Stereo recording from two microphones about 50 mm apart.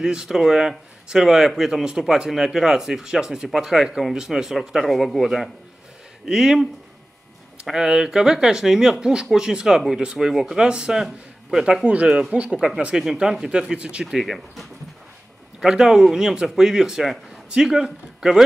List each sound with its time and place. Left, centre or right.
0.0 s speech: centre
6.2 s speech: centre
7.7 s a man's voice: centre
11.9 s speech: right
12.5 s speech: centre
14.0 s speech: centre
15.6 s speech: centre